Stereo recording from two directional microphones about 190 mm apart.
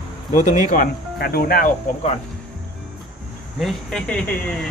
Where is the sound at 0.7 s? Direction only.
50° left (ahead or behind).